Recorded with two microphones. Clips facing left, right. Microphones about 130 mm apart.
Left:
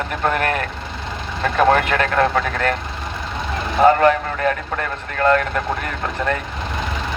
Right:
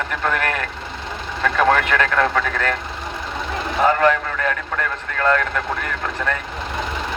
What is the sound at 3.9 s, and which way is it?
Radio, 40° left (ahead or behind).